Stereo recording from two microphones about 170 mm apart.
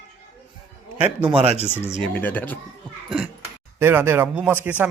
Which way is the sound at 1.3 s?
40° right (ahead or behind).